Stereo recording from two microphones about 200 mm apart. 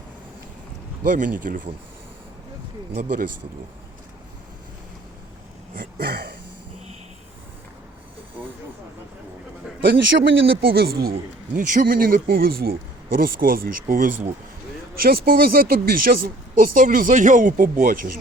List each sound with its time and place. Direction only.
1.2 s speech: 40° right (ahead or behind)
2.9 s speech: 45° right (ahead or behind)
5.7 s speech: 50° right (ahead or behind)
8.4 s vehicle: 10° right (ahead or behind)
9.8 s a man's voice: 55° right (ahead or behind)